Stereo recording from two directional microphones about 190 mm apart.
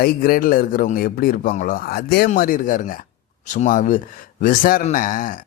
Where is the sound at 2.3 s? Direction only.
45° left (ahead or behind).